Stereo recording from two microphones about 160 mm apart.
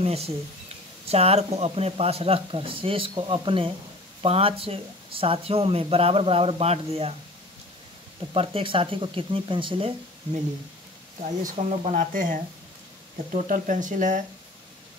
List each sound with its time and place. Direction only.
0.0 s speech: 40° right (ahead or behind)
8.3 s speech: 35° right (ahead or behind)
11.4 s speech: 45° right (ahead or behind)